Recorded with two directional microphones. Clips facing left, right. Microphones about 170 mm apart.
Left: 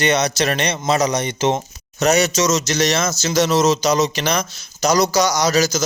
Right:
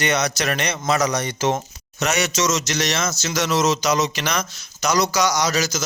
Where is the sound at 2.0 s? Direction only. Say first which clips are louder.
Left 5 dB; 35° left (ahead or behind).